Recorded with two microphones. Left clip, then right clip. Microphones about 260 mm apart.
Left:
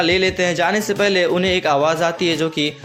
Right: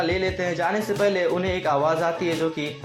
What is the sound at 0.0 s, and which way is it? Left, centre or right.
Speech, left.